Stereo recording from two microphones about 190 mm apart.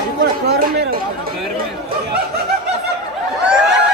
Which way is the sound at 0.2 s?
55° right (ahead or behind).